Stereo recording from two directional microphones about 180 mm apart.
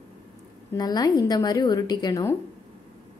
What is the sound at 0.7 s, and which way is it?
A woman's voice, 20° left (ahead or behind).